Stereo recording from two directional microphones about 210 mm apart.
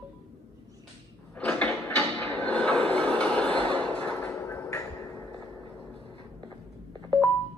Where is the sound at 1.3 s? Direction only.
5° left (ahead or behind).